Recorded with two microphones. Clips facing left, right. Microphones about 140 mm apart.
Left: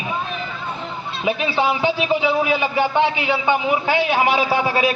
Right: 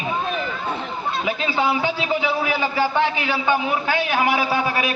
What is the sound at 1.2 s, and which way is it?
A man's voice, 20° left (ahead or behind).